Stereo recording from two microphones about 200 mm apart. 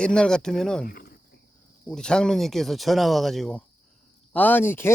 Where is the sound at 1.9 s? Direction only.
5° left (ahead or behind).